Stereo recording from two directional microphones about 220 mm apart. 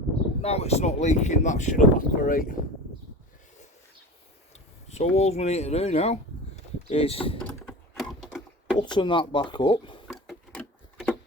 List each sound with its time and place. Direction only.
0.4 s speech: 30° left (ahead or behind)
4.9 s speech: 30° left (ahead or behind)
7.4 s typing: centre (ahead or behind)
8.8 s speech: 20° left (ahead or behind)
10.1 s a sound: centre (ahead or behind)